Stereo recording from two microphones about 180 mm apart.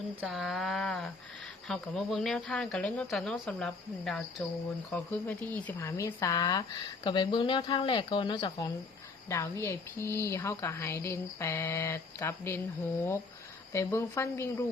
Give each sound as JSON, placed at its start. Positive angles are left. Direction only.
{"t": 0.2, "sound": "a woman's voice", "side_deg": 0}
{"t": 13.7, "sound": "a woman's voice", "side_deg": 15}